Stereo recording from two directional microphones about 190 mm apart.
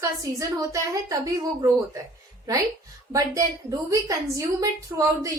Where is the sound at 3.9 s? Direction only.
15° right (ahead or behind).